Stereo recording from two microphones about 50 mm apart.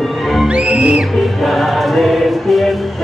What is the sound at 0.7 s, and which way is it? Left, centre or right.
Music, right.